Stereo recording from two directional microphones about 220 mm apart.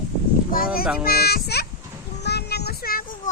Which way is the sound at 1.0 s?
45° left (ahead or behind).